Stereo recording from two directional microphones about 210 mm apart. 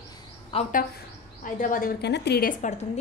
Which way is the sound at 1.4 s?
40° left (ahead or behind).